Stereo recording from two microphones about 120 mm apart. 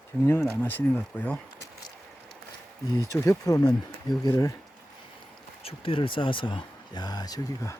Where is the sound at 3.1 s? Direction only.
20° left (ahead or behind).